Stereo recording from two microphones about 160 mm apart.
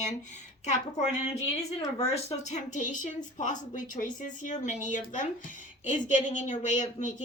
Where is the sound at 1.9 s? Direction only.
40° left (ahead or behind).